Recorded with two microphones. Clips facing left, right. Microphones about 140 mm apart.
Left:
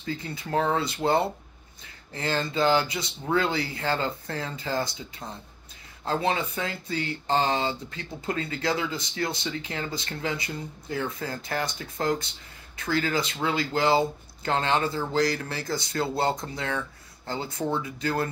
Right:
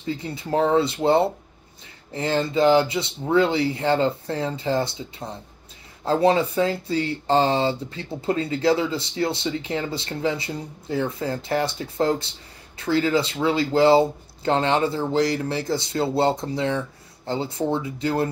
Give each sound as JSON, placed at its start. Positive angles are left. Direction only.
{"t": 0.0, "sound": "speech", "side_deg": -25}
{"t": 6.0, "sound": "speech", "side_deg": -35}